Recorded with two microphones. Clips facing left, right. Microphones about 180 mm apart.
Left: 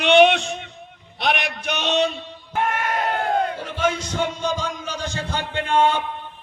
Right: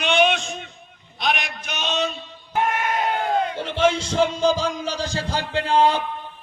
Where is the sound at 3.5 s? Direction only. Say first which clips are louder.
Right 3 dB; 25° right (ahead or behind).